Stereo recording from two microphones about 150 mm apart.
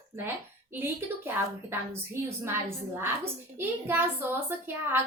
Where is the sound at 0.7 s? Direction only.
15° right (ahead or behind).